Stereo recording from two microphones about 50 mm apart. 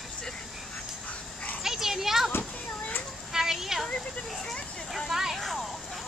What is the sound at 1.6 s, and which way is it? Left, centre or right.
Children playing, centre.